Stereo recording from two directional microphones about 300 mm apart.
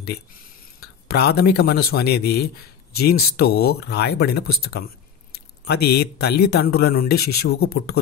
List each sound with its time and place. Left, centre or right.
0.7 s speech: left